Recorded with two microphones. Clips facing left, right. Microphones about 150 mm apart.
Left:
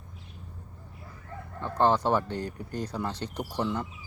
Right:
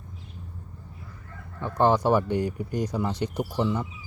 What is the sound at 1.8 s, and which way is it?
Speech, 10° right (ahead or behind).